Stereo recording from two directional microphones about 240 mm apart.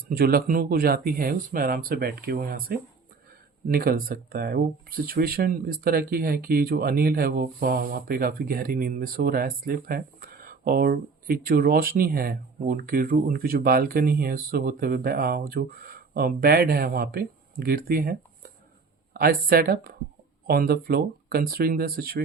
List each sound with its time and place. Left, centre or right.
0.2 s speech: right